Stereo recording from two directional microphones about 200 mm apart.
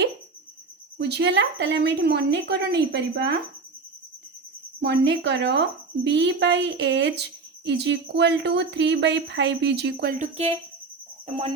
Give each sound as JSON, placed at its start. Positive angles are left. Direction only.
{"t": 0.9, "sound": "a woman's voice", "side_deg": -55}
{"t": 4.8, "sound": "a woman's voice", "side_deg": -60}
{"t": 10.2, "sound": "cricket", "side_deg": -30}